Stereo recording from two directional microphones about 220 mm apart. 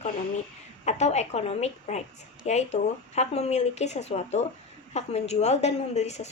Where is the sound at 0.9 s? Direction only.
30° left (ahead or behind).